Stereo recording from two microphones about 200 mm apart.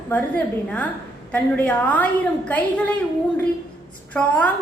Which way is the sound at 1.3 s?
10° left (ahead or behind).